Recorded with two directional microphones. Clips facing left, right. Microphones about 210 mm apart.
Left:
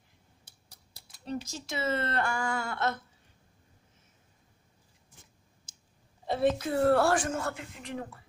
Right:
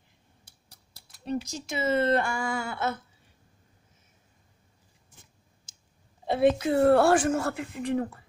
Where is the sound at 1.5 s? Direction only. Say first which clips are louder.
Right 4 dB; 10° right (ahead or behind).